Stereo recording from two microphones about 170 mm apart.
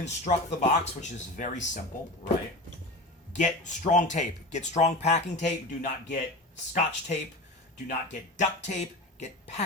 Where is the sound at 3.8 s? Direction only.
45° left (ahead or behind).